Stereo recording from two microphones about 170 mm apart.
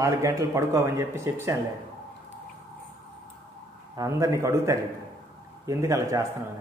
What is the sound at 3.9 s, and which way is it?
A man's voice, 20° right (ahead or behind).